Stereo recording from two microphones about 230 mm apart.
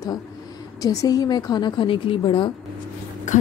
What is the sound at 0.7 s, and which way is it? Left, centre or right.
A woman's voice, centre.